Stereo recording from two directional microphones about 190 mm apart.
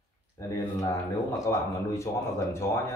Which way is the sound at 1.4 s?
15° left (ahead or behind).